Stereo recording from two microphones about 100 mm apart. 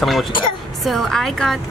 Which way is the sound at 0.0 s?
Centre (ahead or behind).